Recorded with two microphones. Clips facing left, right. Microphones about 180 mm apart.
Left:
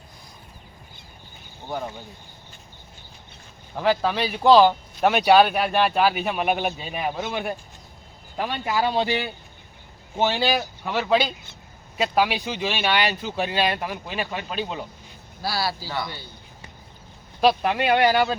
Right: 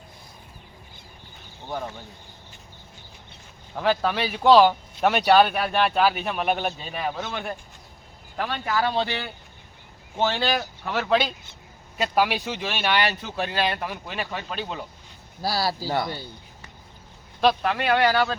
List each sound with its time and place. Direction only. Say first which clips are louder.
1.6 s speech: left 1 dB; 5° left (ahead or behind)
3.8 s speech: left 1 dB; 5° left (ahead or behind)
15.4 s a man's voice: right 1 dB; 40° right (ahead or behind)
17.4 s speech: left 2 dB; 10° left (ahead or behind)